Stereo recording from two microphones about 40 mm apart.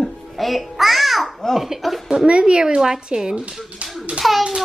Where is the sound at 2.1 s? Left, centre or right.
Right.